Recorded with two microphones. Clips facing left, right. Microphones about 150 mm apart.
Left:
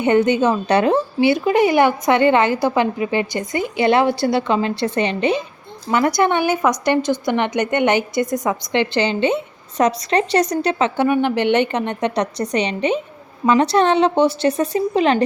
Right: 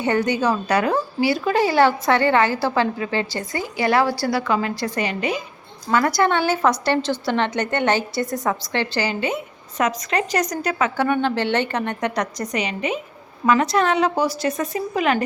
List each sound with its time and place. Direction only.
0.0 s a woman's voice: 20° left (ahead or behind)